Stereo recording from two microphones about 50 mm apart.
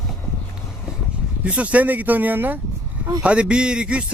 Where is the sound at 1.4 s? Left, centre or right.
Right.